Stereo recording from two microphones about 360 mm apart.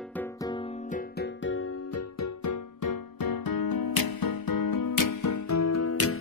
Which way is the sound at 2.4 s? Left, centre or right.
Left.